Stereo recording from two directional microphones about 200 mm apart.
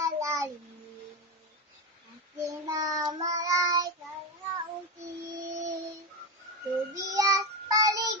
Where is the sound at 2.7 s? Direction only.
20° right (ahead or behind).